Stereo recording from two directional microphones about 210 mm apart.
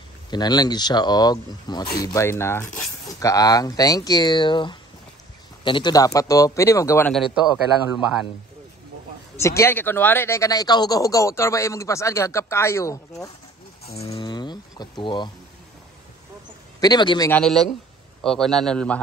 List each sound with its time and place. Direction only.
0.3 s speech: 20° left (ahead or behind)
7.1 s a man's voice: centre (ahead or behind)
9.4 s speech: 15° left (ahead or behind)
13.9 s speech: 25° left (ahead or behind)
16.8 s speech: 20° left (ahead or behind)
17.3 s a man's voice: centre (ahead or behind)